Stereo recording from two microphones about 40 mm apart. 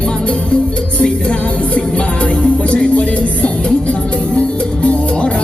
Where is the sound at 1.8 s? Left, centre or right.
Left.